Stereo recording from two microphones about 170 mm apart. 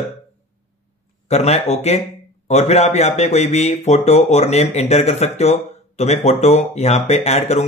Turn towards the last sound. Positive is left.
turn(degrees=40)  # may be behind; listen again after turning